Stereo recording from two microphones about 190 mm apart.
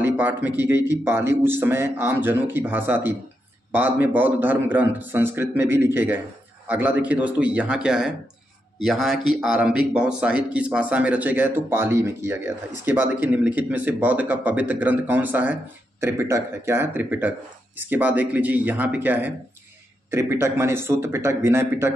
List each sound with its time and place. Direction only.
0.0 s a man's voice: 10° right (ahead or behind)